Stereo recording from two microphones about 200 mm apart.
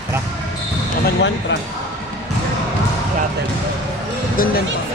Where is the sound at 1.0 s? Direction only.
65° left (ahead or behind).